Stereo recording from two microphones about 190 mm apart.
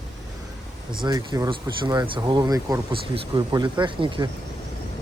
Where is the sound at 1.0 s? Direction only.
20° right (ahead or behind).